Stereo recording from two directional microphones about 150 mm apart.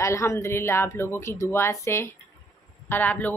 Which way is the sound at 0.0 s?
20° left (ahead or behind).